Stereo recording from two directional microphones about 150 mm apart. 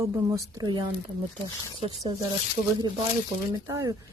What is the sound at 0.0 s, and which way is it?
Speech, 20° right (ahead or behind).